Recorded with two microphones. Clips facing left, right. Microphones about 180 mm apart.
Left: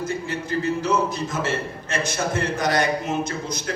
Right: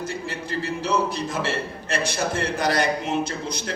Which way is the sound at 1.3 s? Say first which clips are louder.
Left 1 dB; 30° right (ahead or behind).